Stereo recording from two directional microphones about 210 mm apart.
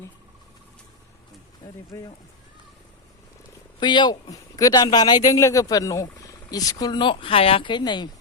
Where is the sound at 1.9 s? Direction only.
15° left (ahead or behind).